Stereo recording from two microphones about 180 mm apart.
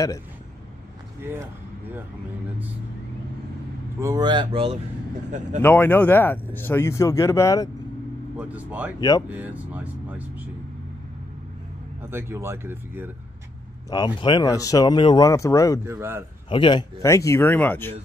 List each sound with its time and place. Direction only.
1.2 s speech: 15° right (ahead or behind)
4.0 s speech: 20° right (ahead or behind)
5.6 s speech: 10° left (ahead or behind)
8.4 s speech: 10° right (ahead or behind)
12.1 s speech: 15° right (ahead or behind)
13.8 s speech: 25° left (ahead or behind)
15.8 s speech: 15° right (ahead or behind)
16.4 s speech: 25° left (ahead or behind)
17.0 s speech: 15° left (ahead or behind)